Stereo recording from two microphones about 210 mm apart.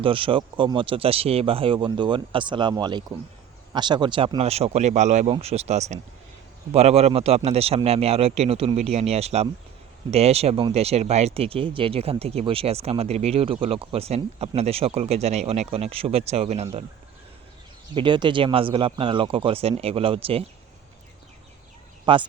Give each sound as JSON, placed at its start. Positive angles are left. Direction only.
{"t": 0.0, "sound": "speech", "side_deg": -25}
{"t": 17.9, "sound": "speech", "side_deg": -20}
{"t": 22.0, "sound": "speech", "side_deg": -25}